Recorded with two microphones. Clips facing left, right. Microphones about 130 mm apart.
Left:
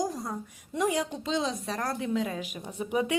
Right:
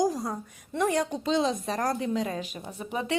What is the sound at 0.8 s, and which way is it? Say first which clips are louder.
Speech: right 2 dB; 10° left (ahead or behind).